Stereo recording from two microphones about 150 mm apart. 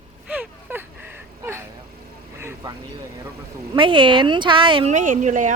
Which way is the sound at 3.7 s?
35° right (ahead or behind).